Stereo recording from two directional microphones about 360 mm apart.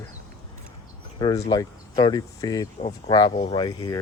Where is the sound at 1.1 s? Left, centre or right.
Centre.